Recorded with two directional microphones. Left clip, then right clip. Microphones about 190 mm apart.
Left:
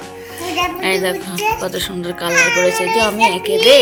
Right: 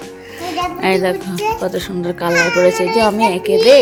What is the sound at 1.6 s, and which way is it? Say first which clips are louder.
Speech: right 1 dB; 30° right (ahead or behind).